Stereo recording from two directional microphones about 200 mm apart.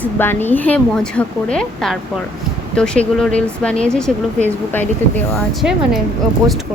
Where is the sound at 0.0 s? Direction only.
10° left (ahead or behind).